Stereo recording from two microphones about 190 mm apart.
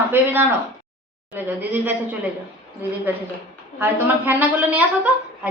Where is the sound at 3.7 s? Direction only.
10° right (ahead or behind).